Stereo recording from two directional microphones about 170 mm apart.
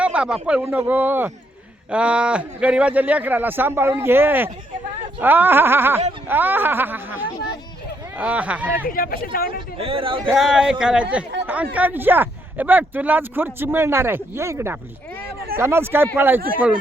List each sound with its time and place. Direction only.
0.0 s speech: 5° right (ahead or behind)
8.9 s speech: 60° left (ahead or behind)
9.7 s a man's voice: 35° right (ahead or behind)
10.2 s a man's voice: centre (ahead or behind)